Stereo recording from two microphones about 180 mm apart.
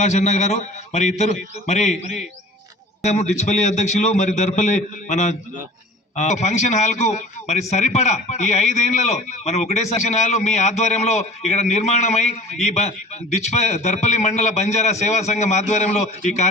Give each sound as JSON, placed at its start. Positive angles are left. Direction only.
{"t": 0.0, "sound": "a man's voice", "side_deg": 40}